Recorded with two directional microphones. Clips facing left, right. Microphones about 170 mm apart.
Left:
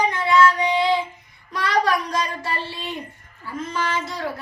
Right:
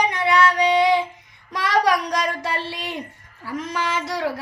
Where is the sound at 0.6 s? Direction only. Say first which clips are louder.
Right 3 dB; 20° right (ahead or behind).